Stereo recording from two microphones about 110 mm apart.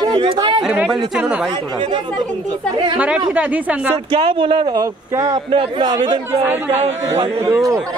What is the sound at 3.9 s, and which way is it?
Speech, 50° right (ahead or behind).